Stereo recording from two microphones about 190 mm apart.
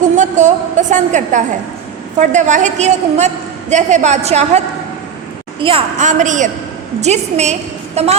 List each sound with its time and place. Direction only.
0.2 s a sound: 40° right (ahead or behind)
2.1 s a woman's voice: 40° right (ahead or behind)
5.6 s a woman's voice: 35° right (ahead or behind)